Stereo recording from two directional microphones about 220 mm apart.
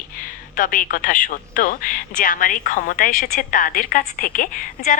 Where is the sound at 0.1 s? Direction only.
40° left (ahead or behind).